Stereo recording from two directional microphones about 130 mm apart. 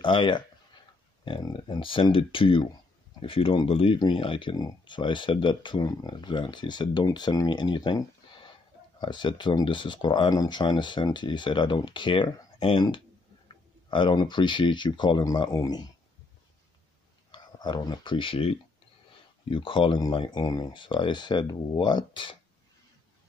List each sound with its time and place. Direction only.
0.0 s speech: 40° left (ahead or behind)
13.8 s speech: 40° left (ahead or behind)
17.3 s speech: 35° left (ahead or behind)